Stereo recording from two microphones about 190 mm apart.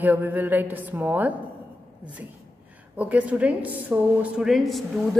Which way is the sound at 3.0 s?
5° right (ahead or behind).